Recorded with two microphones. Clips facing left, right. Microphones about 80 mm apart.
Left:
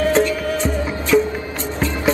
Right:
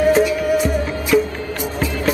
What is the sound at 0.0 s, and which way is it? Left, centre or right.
Music, centre.